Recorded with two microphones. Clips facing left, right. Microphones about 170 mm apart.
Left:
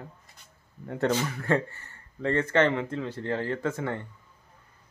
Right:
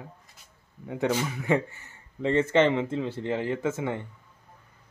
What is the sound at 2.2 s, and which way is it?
Speech, 20° right (ahead or behind).